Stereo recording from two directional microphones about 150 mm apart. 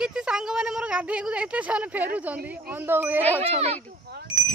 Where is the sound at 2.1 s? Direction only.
10° right (ahead or behind).